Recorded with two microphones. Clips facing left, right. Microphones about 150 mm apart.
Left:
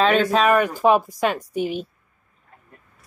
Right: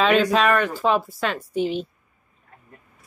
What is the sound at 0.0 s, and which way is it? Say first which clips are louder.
A woman's voice: left 1 dB; centre (ahead or behind).